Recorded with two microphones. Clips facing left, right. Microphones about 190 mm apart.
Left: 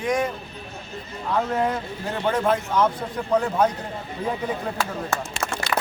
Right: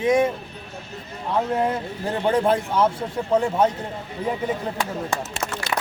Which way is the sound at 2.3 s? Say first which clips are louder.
Right 1 dB; 30° right (ahead or behind).